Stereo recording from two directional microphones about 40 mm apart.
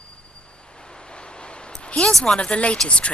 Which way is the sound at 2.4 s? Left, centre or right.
Left.